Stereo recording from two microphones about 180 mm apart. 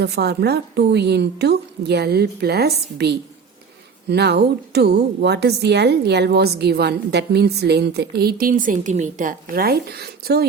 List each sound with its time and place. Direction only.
0.0 s a woman's voice: 65° right (ahead or behind)